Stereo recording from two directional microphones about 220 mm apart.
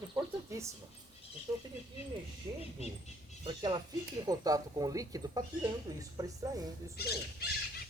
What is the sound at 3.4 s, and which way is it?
Speech, 20° right (ahead or behind).